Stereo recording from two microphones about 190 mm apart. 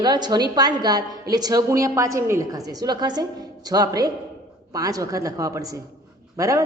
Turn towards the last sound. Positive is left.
turn(degrees=-15)  # may be behind; listen again after turning